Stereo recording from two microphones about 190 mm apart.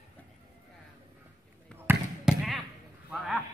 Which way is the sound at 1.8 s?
Centre (ahead or behind).